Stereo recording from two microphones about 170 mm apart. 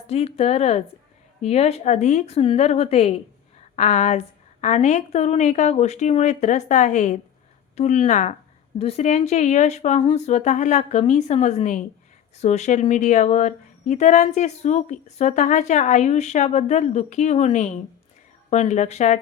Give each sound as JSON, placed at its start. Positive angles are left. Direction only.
{"t": 0.1, "sound": "a woman's voice", "side_deg": 35}